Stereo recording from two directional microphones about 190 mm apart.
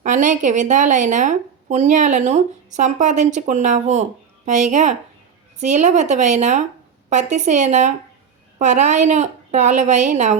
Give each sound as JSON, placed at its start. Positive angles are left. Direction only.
{"t": 0.0, "sound": "a woman's voice", "side_deg": -40}